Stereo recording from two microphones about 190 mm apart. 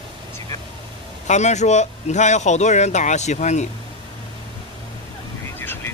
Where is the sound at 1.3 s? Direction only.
35° left (ahead or behind).